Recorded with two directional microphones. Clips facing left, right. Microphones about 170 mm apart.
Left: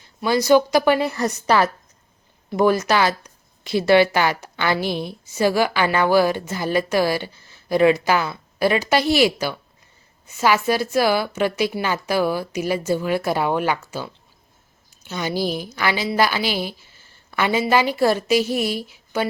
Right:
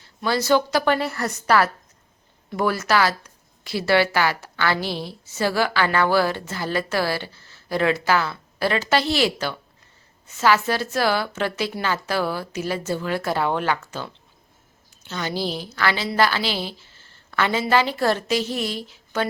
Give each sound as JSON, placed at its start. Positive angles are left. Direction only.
{"t": 0.0, "sound": "speech", "side_deg": 15}